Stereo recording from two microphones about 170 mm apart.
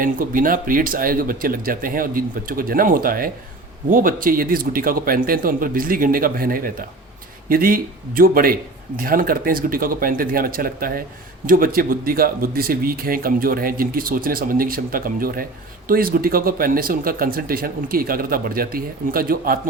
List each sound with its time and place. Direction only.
0.0 s speech: 55° right (ahead or behind)